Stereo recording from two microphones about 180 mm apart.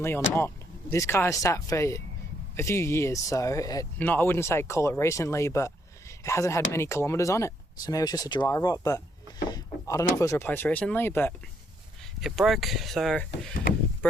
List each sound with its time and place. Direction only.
0.3 s speech: 15° left (ahead or behind)
12.2 s speech: centre (ahead or behind)